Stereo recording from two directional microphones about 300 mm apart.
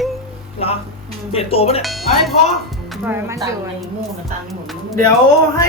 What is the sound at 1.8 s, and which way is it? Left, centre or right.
Speech, centre.